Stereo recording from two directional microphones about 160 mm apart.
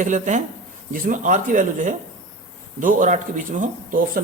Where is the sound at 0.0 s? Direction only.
50° right (ahead or behind).